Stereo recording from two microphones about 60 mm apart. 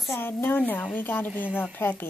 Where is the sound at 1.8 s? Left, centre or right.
Left.